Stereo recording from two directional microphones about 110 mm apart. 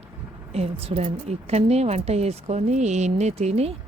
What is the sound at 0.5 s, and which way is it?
Speech, 70° right (ahead or behind).